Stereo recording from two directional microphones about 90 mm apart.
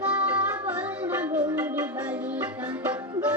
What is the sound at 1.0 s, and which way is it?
Music, 15° right (ahead or behind).